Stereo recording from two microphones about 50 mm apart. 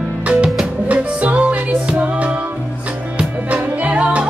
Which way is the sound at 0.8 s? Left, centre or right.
Right.